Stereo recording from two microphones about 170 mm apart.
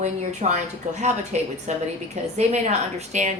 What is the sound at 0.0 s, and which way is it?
Speech, 40° right (ahead or behind).